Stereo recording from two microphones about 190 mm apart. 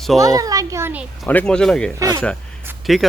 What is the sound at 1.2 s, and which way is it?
Speech, 5° left (ahead or behind).